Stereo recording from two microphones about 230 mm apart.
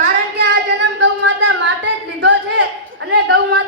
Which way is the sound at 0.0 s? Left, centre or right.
Right.